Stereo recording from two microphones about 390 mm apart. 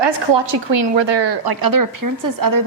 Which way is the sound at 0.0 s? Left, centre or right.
Right.